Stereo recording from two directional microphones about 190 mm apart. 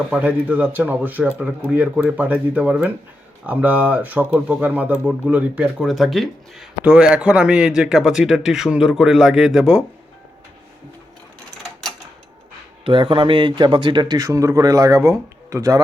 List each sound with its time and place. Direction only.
0.1 s speech: 10° right (ahead or behind)
12.8 s speech: 25° right (ahead or behind)